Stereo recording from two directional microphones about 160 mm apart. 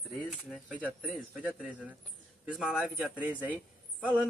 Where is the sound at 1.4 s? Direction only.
10° right (ahead or behind).